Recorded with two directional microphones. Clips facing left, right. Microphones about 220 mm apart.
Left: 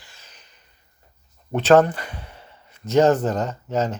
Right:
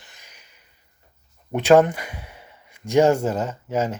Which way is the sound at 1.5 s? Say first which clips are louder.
Even; 10° right (ahead or behind).